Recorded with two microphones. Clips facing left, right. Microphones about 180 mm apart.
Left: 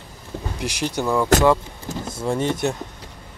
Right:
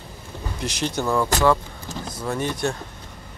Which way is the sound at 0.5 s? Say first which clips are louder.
Left 1 dB; 10° left (ahead or behind).